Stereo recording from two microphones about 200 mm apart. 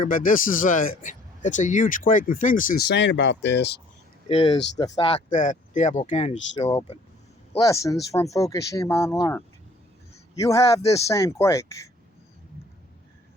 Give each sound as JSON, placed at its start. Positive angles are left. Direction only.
{"t": 0.0, "sound": "a man's voice", "side_deg": 45}
{"t": 4.3, "sound": "speech", "side_deg": 25}
{"t": 5.3, "sound": "speech", "side_deg": 40}
{"t": 7.6, "sound": "speech", "side_deg": 15}